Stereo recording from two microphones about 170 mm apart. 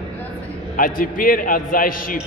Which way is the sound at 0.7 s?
55° left (ahead or behind).